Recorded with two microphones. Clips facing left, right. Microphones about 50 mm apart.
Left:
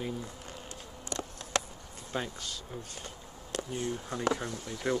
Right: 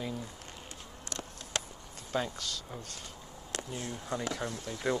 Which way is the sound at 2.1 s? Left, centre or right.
Centre.